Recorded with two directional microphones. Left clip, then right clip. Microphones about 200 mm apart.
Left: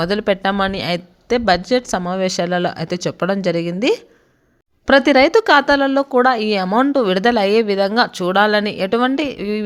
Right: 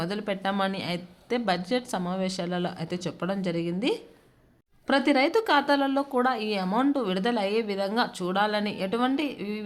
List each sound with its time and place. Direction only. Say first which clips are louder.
0.0 s speech: left 12 dB; 40° left (ahead or behind)